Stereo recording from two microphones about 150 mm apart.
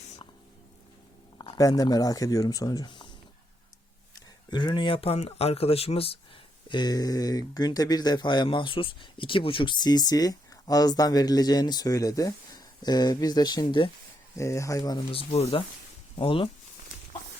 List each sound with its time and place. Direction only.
1.4 s speech: 25° left (ahead or behind)
4.5 s speech: 30° left (ahead or behind)
6.7 s speech: 30° left (ahead or behind)
14.3 s speech: 20° left (ahead or behind)
15.1 s speech: 40° left (ahead or behind)